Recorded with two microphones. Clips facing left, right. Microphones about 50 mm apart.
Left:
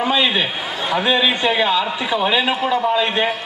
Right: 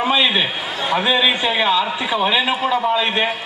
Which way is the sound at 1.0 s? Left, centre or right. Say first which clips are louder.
Left 1 dB; centre.